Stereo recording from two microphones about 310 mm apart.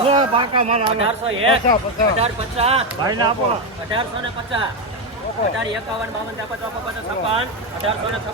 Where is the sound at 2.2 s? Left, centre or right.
Centre.